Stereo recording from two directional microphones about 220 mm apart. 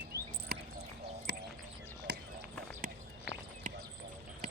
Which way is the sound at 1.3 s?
50° right (ahead or behind).